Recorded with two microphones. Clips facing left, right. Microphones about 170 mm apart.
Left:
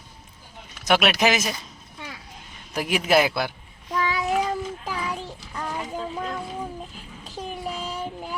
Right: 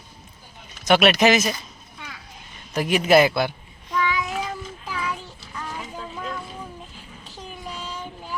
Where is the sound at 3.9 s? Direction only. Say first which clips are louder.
Even; 40° left (ahead or behind).